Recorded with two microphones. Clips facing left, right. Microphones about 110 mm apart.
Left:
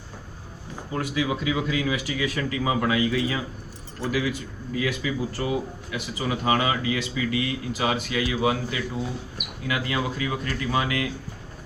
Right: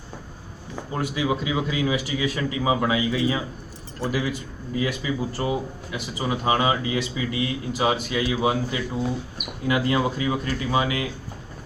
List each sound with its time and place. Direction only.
0.9 s speech: 30° right (ahead or behind)
4.7 s speech: 25° right (ahead or behind)